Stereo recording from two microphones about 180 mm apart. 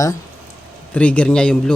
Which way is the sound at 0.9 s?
5° left (ahead or behind).